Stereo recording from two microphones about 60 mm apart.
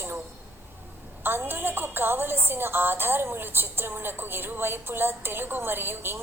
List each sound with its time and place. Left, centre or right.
1.2 s a woman's voice: right